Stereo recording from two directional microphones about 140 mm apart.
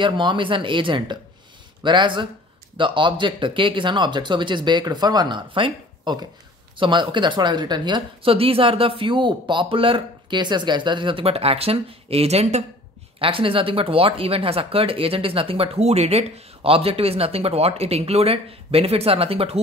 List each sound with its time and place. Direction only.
0.0 s speech: 35° right (ahead or behind); by 12.6 s 50° right (ahead or behind)
13.2 s speech: 40° right (ahead or behind)